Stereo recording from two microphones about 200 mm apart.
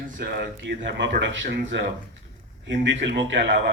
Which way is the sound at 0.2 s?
50° right (ahead or behind).